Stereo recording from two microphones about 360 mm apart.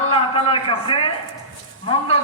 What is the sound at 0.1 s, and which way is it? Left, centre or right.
A man's voice, centre.